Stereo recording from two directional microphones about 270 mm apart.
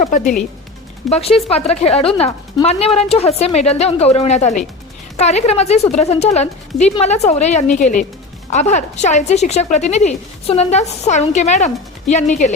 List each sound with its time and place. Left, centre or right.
1.1 s a woman's voice: left